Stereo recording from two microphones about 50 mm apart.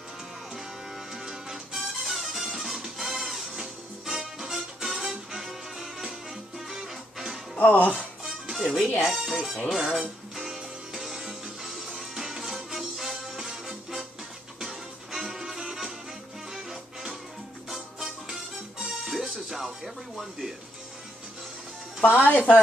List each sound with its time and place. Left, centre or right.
1.1 s music: centre
7.6 s speech: left
8.5 s speech: centre
9.8 s music: centre
17.6 s music: centre
22.0 s speech: left